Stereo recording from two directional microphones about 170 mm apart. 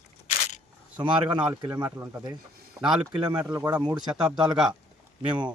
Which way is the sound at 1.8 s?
10° right (ahead or behind).